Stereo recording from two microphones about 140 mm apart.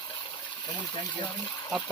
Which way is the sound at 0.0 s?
35° left (ahead or behind).